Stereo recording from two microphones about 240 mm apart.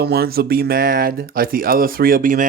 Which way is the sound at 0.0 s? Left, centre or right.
Right.